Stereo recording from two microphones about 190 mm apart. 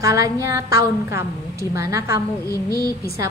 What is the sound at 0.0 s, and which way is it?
A woman's voice, 15° right (ahead or behind).